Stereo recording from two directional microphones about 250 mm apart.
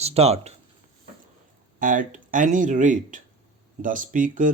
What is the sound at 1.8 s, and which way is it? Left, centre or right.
Speech, right.